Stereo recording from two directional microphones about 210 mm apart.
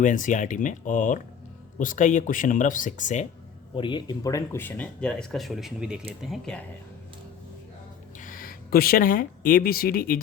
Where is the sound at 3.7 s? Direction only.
20° left (ahead or behind); by 6.6 s 5° left (ahead or behind).